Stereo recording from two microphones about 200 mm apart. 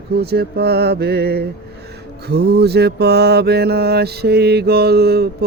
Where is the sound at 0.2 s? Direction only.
50° right (ahead or behind).